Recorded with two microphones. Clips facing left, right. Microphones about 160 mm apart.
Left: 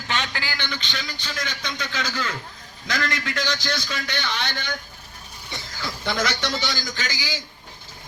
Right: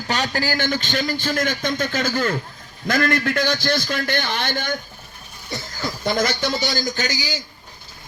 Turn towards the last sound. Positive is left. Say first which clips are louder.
# right 6 dB
turn(degrees=-45)  # may be behind; listen again after turning